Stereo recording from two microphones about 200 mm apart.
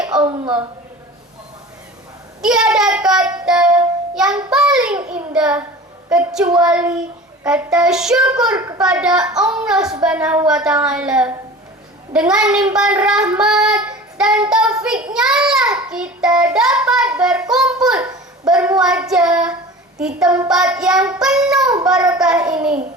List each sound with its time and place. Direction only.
0.0 s a sound: 5° right (ahead or behind)
2.4 s child singing: 5° right (ahead or behind)
4.5 s a woman's voice: 5° right (ahead or behind)
12.7 s child singing: 5° right (ahead or behind)
14.5 s a child's voice: 5° right (ahead or behind)
15.7 s child singing: 5° right (ahead or behind)
17.5 s a woman's voice: 5° right (ahead or behind)
20.2 s a child's voice: 15° right (ahead or behind)
20.5 s a woman's voice: 5° right (ahead or behind)